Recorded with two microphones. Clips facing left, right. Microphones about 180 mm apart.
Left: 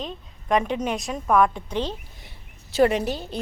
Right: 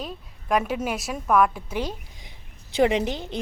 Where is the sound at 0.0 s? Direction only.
5° right (ahead or behind).